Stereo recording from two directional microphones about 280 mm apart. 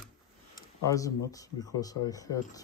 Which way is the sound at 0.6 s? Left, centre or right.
Centre.